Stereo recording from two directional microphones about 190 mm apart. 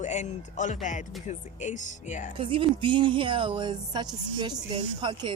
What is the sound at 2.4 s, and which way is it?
Speech, 25° right (ahead or behind).